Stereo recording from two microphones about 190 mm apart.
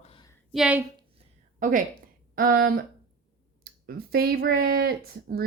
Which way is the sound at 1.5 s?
45° right (ahead or behind).